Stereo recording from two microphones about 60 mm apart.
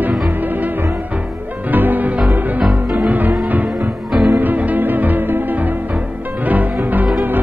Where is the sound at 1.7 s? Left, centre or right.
Right.